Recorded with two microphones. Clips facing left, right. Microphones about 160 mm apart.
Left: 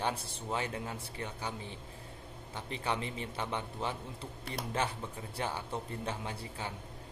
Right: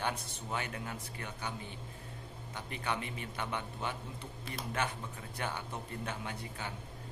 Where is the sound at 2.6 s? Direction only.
30° left (ahead or behind).